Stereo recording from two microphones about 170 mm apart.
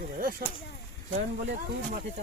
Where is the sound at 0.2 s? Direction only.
55° right (ahead or behind).